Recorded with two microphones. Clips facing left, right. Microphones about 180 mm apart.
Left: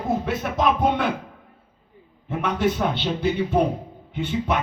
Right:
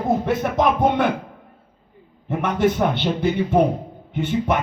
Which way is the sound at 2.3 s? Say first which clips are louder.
Right 3 dB; 45° right (ahead or behind).